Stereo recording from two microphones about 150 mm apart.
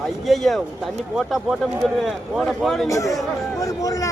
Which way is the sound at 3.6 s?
20° left (ahead or behind).